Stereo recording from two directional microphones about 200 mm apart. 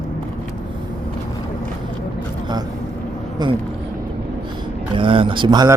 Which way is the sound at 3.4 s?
20° right (ahead or behind).